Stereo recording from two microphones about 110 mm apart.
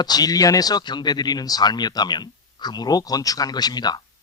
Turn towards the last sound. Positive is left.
turn(degrees=40)  # may be behind; listen again after turning